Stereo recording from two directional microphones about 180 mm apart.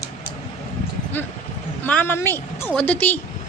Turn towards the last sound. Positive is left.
turn(degrees=10)  # may be behind; listen again after turning